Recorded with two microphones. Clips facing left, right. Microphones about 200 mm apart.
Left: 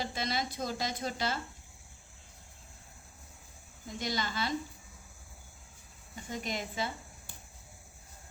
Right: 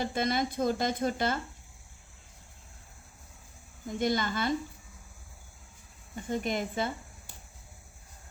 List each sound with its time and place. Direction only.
0.0 s speech: 50° right (ahead or behind)
3.8 s speech: 50° right (ahead or behind)
6.3 s speech: 50° right (ahead or behind)